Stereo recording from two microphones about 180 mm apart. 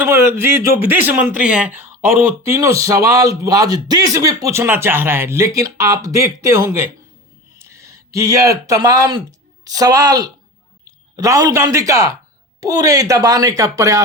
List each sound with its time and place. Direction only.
0.0 s speech: 15° right (ahead or behind)